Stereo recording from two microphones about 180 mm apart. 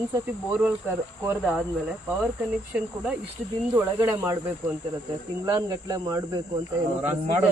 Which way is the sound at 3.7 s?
15° right (ahead or behind).